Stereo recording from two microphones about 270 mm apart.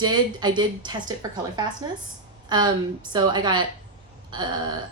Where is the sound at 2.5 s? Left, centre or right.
Centre.